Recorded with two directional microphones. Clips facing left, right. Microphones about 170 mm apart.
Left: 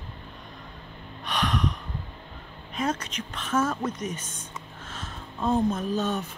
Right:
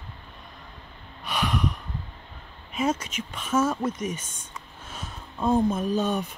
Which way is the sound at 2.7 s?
5° right (ahead or behind).